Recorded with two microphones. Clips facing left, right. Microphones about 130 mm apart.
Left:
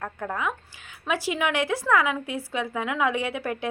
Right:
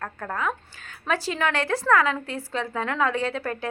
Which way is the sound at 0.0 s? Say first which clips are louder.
Even; 10° left (ahead or behind).